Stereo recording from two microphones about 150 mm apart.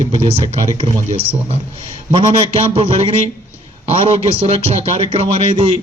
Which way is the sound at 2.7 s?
35° right (ahead or behind).